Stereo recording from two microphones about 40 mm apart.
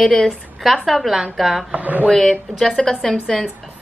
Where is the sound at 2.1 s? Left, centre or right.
Centre.